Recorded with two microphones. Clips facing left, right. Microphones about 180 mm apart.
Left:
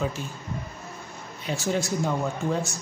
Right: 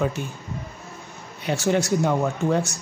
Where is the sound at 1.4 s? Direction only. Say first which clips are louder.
Right 5 dB; 70° right (ahead or behind).